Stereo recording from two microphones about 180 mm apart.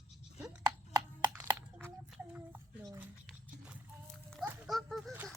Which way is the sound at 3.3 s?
5° right (ahead or behind).